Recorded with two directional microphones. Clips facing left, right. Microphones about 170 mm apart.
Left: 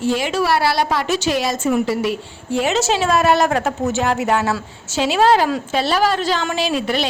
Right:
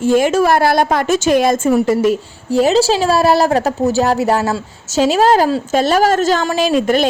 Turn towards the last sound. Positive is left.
turn(degrees=-45)  # may be behind; listen again after turning